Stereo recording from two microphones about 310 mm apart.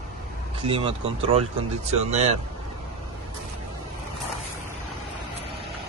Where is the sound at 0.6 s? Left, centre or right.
Centre.